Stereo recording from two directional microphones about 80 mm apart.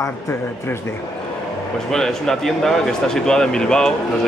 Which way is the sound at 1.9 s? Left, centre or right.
Centre.